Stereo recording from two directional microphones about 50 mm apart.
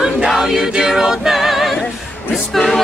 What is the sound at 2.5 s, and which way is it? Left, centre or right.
Speech, centre.